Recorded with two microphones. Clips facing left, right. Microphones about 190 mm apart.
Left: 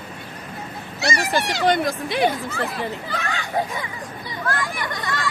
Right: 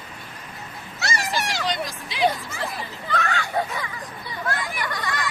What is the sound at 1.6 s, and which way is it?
Speech, 55° left (ahead or behind).